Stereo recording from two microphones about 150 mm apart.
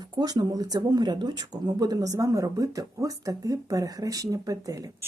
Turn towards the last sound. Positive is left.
turn(degrees=-20)  # may be behind; listen again after turning